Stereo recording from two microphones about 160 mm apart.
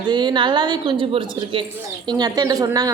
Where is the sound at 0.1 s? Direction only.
25° right (ahead or behind).